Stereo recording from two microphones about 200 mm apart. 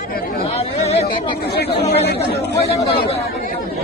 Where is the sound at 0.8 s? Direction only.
30° left (ahead or behind).